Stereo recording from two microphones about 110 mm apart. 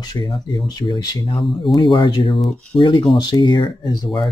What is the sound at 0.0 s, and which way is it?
Speech, 40° left (ahead or behind).